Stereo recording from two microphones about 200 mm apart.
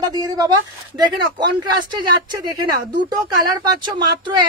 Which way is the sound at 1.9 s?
20° right (ahead or behind).